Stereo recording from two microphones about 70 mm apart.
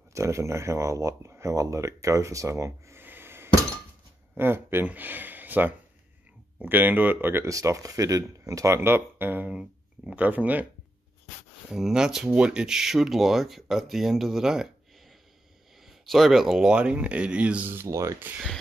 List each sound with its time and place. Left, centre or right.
0.1 s speech: right
3.0 s a sound: right
4.4 s speech: right
7.4 s speech: right
9.5 s speech: centre
11.7 s speech: centre
16.1 s speech: centre
17.6 s speech: right
17.9 s speech: right